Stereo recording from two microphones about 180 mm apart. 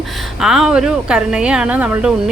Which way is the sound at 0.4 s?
5° right (ahead or behind).